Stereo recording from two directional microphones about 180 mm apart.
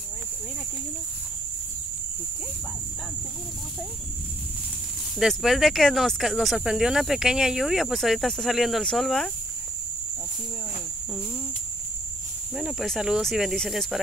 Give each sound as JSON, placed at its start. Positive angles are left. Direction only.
{"t": 5.2, "sound": "speech", "side_deg": 0}
{"t": 12.5, "sound": "speech", "side_deg": 0}